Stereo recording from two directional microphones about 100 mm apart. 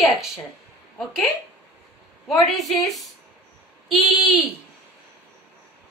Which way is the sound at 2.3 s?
Centre (ahead or behind).